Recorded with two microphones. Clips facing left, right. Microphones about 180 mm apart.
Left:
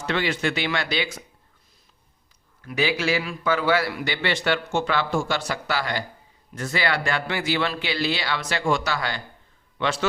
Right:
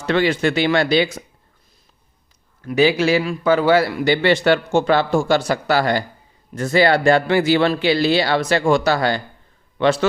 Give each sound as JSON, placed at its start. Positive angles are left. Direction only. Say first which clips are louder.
{"t": 0.1, "sound": "speech", "louder": "right 8 dB", "side_deg": -35}
{"t": 2.6, "sound": "speech", "louder": "right 8 dB", "side_deg": -35}